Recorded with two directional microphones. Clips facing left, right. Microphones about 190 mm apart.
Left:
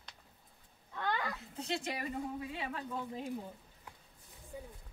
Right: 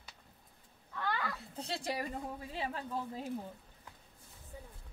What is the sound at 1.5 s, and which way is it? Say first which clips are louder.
Speech: even; 35° right (ahead or behind).